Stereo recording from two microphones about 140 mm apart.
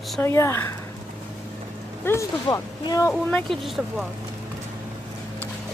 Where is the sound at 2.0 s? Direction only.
20° left (ahead or behind).